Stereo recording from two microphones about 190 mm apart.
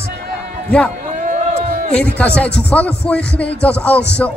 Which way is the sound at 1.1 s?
45° right (ahead or behind).